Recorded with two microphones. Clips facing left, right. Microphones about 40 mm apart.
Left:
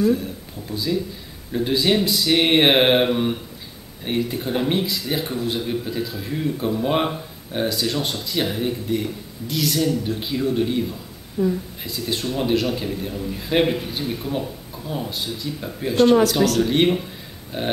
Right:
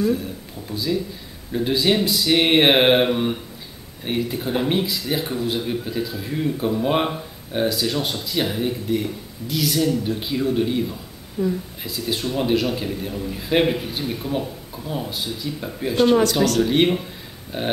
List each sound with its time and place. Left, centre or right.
0.0 s speech: centre